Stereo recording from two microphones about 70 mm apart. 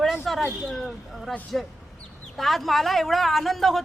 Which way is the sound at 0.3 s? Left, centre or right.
Centre.